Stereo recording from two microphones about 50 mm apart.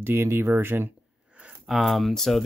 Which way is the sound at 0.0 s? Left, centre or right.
Right.